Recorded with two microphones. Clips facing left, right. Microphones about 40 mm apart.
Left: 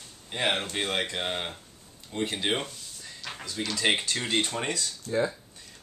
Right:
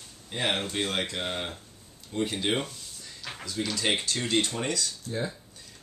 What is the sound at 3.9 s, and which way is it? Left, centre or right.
Speech, centre.